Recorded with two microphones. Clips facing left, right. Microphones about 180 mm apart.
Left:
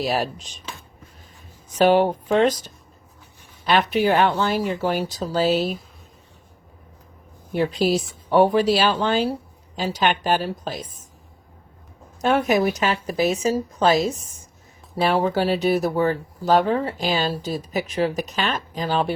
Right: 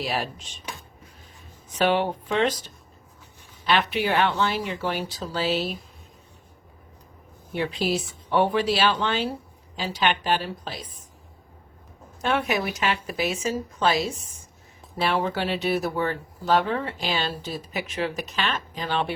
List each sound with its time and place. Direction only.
0.0 s speech: 40° left (ahead or behind)
1.7 s speech: 40° left (ahead or behind)
7.5 s speech: 40° left (ahead or behind)
12.2 s speech: 40° left (ahead or behind)